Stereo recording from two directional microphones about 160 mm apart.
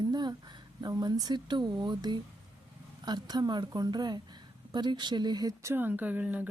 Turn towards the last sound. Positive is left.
turn(degrees=-10)  # may be behind; listen again after turning